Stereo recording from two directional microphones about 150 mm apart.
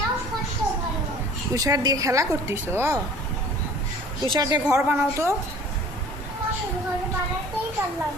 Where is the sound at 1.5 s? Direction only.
25° right (ahead or behind).